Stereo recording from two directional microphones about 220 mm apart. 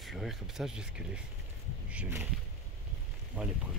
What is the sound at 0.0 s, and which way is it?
Speech, centre (ahead or behind).